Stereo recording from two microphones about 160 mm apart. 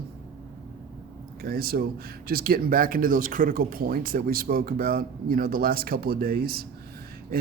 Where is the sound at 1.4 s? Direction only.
70° right (ahead or behind).